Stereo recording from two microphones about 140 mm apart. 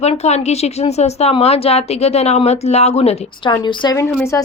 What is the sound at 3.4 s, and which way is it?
Speech, 35° left (ahead or behind).